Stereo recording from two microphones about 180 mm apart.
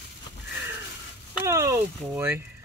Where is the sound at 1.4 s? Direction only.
15° right (ahead or behind).